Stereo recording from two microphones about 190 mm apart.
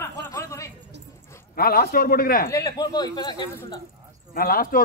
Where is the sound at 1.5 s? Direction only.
50° left (ahead or behind).